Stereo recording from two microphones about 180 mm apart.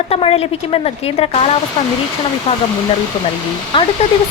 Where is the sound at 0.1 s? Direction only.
35° left (ahead or behind).